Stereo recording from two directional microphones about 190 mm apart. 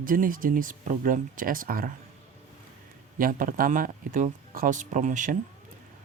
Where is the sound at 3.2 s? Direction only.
45° right (ahead or behind).